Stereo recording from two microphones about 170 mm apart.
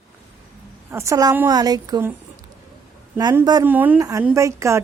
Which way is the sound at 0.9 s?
15° right (ahead or behind).